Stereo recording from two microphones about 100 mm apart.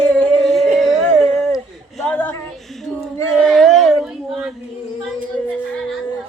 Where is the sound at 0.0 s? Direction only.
10° left (ahead or behind).